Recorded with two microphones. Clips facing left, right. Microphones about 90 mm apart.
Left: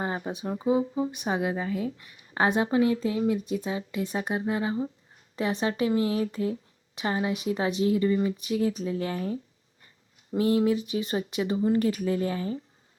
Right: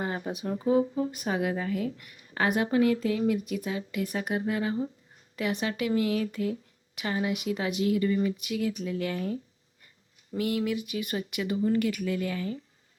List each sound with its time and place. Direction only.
0.0 s a woman's voice: 25° left (ahead or behind)